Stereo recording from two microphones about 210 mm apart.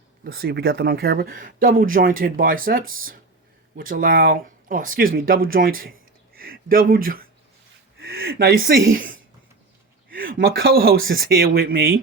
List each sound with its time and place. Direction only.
0.3 s speech: 45° right (ahead or behind)
10.1 s a sound: 45° right (ahead or behind)
10.4 s speech: 45° right (ahead or behind)